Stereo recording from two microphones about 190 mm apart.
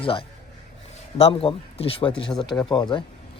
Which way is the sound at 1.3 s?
30° left (ahead or behind).